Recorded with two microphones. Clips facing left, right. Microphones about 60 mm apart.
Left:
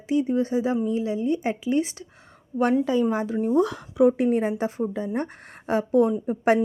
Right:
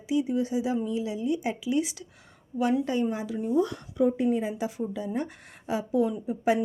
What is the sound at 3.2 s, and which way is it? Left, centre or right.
Speech, left.